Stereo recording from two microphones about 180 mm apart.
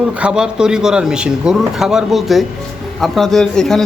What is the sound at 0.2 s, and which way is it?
Speech, 5° right (ahead or behind).